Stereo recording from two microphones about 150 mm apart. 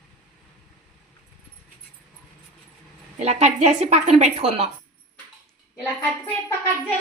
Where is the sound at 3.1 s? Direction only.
45° right (ahead or behind).